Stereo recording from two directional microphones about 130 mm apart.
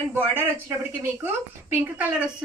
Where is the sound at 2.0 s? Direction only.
10° right (ahead or behind).